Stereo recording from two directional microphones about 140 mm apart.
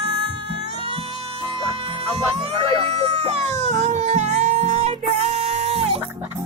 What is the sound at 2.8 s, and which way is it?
Music, 50° right (ahead or behind).